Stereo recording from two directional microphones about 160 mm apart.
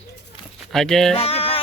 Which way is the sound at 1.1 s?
40° left (ahead or behind).